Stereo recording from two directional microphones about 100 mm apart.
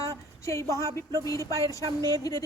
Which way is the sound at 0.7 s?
35° right (ahead or behind).